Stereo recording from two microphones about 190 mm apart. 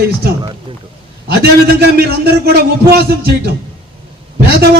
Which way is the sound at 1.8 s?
60° right (ahead or behind).